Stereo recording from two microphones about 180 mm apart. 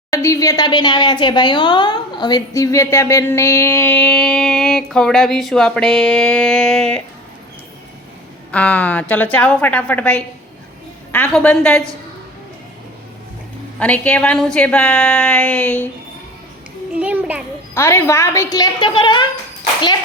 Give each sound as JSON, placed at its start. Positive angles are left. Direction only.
{"t": 0.1, "sound": "speech", "side_deg": 15}
{"t": 8.5, "sound": "a woman's voice", "side_deg": 5}
{"t": 13.7, "sound": "speech", "side_deg": 5}
{"t": 16.9, "sound": "a child's voice", "side_deg": -10}
{"t": 17.7, "sound": "a woman's voice", "side_deg": 15}